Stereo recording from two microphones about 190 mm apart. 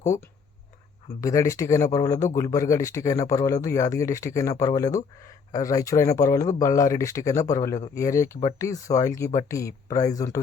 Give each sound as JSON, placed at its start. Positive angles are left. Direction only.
{"t": 1.2, "sound": "speech", "side_deg": 15}